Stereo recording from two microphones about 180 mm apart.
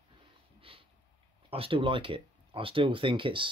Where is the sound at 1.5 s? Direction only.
30° right (ahead or behind).